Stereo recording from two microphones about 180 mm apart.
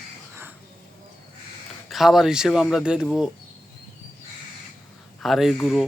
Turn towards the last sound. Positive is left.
turn(degrees=0)  # may be behind; listen again after turning